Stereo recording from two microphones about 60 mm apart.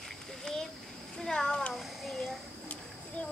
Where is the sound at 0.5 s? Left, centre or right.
Centre.